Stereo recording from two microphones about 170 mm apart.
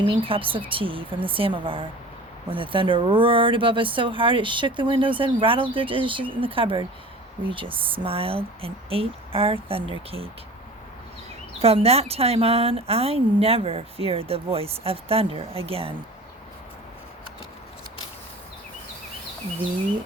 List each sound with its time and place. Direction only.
0.0 s speech: 30° right (ahead or behind)
11.6 s speech: 35° right (ahead or behind)